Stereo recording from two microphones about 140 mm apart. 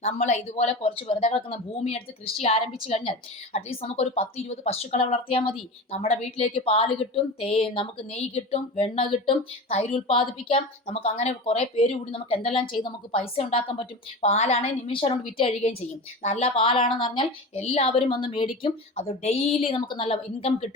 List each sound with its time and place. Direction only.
0.0 s a woman's voice: 50° left (ahead or behind)